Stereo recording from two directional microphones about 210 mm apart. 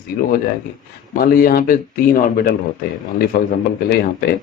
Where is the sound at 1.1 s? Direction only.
45° left (ahead or behind).